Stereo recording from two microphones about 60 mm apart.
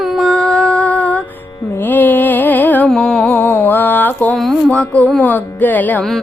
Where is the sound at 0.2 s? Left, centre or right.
Centre.